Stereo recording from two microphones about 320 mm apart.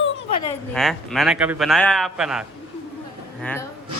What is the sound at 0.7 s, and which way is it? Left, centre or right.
Speech, centre.